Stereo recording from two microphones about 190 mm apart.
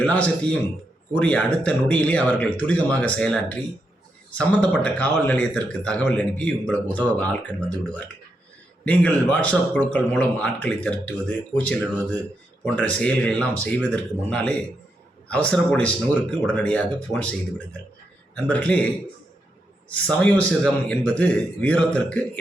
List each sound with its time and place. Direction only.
0.0 s a man's voice: 5° left (ahead or behind)
18.3 s a man's voice: 5° left (ahead or behind)
19.9 s a man's voice: 5° left (ahead or behind)